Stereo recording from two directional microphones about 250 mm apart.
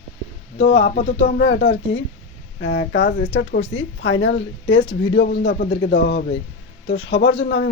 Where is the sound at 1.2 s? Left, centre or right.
Left.